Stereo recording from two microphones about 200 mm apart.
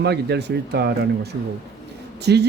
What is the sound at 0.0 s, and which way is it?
Speech, 55° right (ahead or behind).